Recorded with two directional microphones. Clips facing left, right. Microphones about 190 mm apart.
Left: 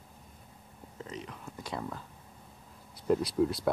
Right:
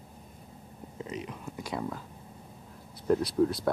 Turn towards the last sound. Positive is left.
turn(degrees=5)  # may be behind; listen again after turning